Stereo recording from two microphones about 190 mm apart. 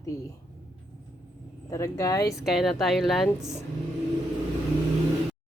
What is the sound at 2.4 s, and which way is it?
Speech, centre (ahead or behind).